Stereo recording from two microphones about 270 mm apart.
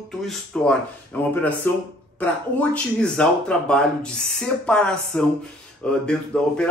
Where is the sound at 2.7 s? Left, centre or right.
Centre.